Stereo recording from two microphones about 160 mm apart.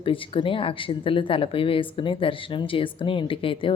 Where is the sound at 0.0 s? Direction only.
35° left (ahead or behind).